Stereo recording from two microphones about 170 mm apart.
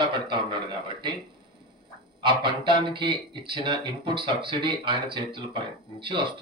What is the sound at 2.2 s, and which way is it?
Speech, 25° right (ahead or behind).